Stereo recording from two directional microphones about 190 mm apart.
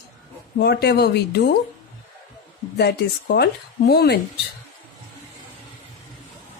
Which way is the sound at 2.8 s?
60° left (ahead or behind).